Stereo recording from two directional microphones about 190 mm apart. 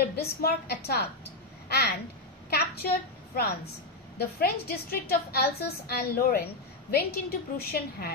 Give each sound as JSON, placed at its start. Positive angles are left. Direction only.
{"t": 0.1, "sound": "a woman's voice", "side_deg": 55}
{"t": 1.7, "sound": "babbling", "side_deg": 55}
{"t": 2.5, "sound": "a woman's voice", "side_deg": 55}
{"t": 4.2, "sound": "a woman's voice", "side_deg": 55}